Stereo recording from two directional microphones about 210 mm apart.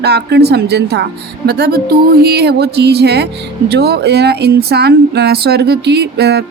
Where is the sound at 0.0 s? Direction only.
50° right (ahead or behind).